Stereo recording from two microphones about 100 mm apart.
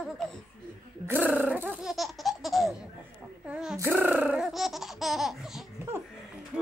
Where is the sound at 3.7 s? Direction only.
20° right (ahead or behind); by 5.6 s 5° right (ahead or behind).